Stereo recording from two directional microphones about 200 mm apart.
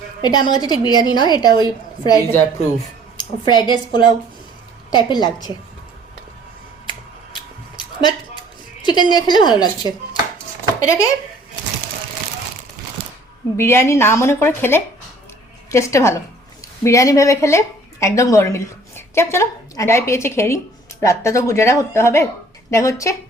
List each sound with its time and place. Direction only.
0.2 s a woman's voice: 20° left (ahead or behind)
7.8 s a sound: 20° left (ahead or behind)
10.8 s speech: 15° left (ahead or behind)
13.6 s a woman's voice: 10° left (ahead or behind)